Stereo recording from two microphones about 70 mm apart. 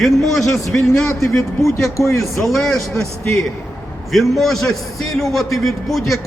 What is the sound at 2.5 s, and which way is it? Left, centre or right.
Speech, centre.